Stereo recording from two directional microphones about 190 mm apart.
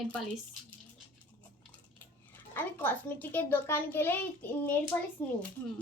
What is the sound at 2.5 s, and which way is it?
A child's voice, 10° left (ahead or behind).